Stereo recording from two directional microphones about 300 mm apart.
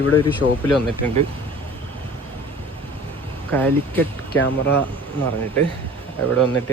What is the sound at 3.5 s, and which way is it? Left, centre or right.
Speech, centre.